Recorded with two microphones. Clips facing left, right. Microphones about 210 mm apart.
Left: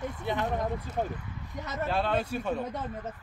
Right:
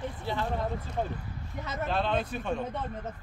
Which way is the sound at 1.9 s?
10° left (ahead or behind).